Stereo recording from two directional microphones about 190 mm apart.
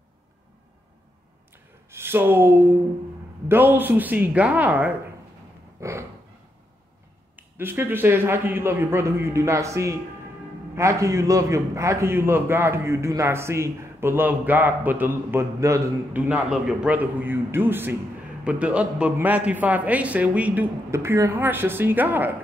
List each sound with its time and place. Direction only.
1.9 s a man's voice: 10° right (ahead or behind)
5.8 s cat: 15° right (ahead or behind)
7.3 s a man's voice: 10° right (ahead or behind)